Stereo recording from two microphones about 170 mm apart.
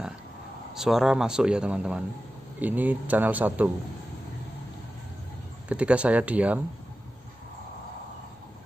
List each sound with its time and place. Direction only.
0.7 s speech: centre (ahead or behind)
5.7 s speech: 5° right (ahead or behind)